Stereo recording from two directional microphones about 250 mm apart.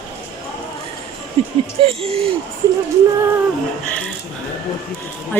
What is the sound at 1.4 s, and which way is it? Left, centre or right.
Speech, right.